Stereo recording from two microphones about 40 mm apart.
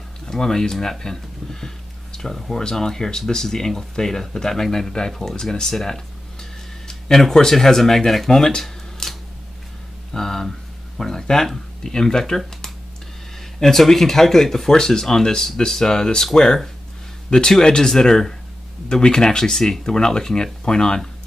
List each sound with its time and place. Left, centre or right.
0.3 s speech: centre
9.0 s a sound: centre
11.0 s speech: centre
19.5 s speech: centre
19.9 s speech: centre